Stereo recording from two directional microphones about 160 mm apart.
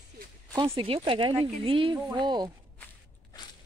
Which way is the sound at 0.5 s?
30° right (ahead or behind).